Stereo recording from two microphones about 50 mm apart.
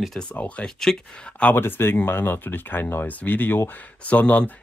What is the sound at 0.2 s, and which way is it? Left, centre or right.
Speech, left.